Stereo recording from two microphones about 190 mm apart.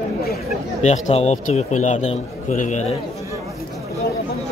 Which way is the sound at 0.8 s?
35° left (ahead or behind).